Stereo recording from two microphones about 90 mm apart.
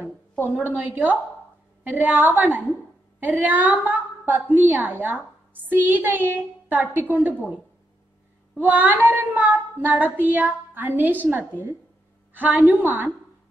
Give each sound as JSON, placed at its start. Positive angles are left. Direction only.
{"t": 0.0, "sound": "a sound", "side_deg": -20}
{"t": 0.6, "sound": "a woman's voice", "side_deg": -20}
{"t": 8.5, "sound": "a woman's voice", "side_deg": -20}